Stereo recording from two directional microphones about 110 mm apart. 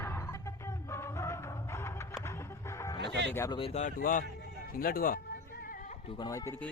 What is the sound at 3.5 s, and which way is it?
Speech, 50° left (ahead or behind).